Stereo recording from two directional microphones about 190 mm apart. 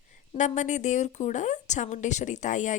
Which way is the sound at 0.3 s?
40° left (ahead or behind).